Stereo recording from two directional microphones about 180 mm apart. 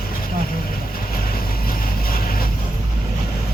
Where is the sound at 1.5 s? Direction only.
55° left (ahead or behind).